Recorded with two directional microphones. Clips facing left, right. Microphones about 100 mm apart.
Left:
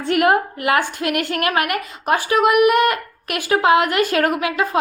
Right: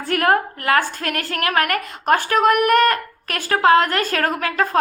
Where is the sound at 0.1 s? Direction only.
20° left (ahead or behind).